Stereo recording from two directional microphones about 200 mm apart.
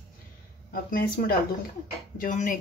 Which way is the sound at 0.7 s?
45° left (ahead or behind).